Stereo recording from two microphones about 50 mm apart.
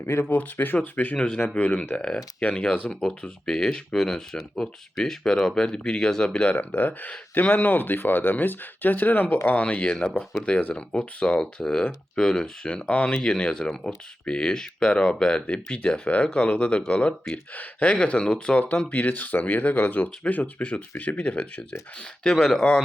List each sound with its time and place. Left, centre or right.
0.0 s speech: left
1.1 s speech: centre
1.5 s speech: left
2.0 s speech: centre
2.4 s speech: left
6.7 s speech: left
13.1 s speech: centre
18.9 s speech: left
22.4 s speech: centre